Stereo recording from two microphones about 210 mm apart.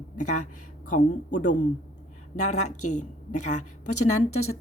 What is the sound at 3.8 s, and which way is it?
Speech, 90° left.